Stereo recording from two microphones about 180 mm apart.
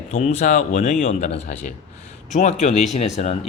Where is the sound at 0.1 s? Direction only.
40° left (ahead or behind).